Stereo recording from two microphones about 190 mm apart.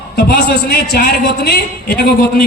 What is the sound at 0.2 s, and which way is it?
A man's voice, 55° left (ahead or behind).